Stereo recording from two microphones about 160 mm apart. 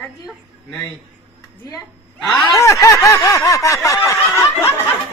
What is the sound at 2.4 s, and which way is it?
Snicker, 20° left (ahead or behind).